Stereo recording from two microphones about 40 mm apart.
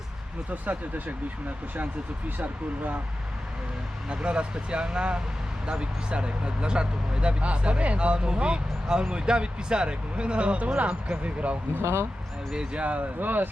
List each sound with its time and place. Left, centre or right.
0.5 s speech: right
2.4 s speech: right
4.1 s speech: right
12.5 s speech: right
13.1 s speech: right